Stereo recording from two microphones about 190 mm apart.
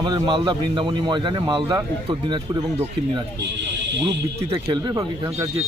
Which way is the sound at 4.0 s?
20° right (ahead or behind).